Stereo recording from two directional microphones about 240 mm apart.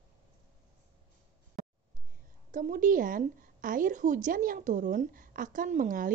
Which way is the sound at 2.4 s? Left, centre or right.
Right.